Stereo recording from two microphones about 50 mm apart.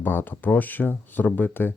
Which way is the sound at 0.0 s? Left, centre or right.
Left.